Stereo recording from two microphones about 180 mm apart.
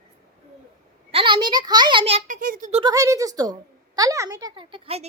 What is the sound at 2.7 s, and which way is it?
A woman's voice, 25° right (ahead or behind).